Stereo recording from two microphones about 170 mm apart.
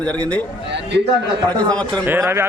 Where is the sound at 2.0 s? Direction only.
15° right (ahead or behind).